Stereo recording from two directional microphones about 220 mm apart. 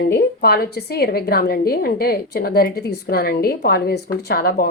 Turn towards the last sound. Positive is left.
turn(degrees=45)  # may be behind; listen again after turning